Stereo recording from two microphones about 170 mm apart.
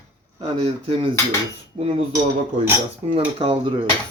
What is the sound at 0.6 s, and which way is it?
Speech, 35° right (ahead or behind).